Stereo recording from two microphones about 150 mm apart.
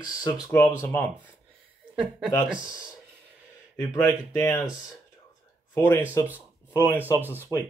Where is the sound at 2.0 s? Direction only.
5° right (ahead or behind).